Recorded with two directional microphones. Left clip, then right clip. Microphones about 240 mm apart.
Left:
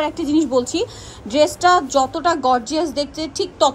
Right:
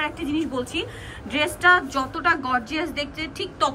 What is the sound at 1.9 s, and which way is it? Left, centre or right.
Speech, centre.